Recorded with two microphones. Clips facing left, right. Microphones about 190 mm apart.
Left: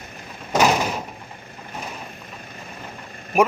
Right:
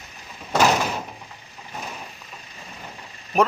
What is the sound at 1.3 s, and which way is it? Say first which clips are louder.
Vehicle: left 4 dB; 55° left (ahead or behind).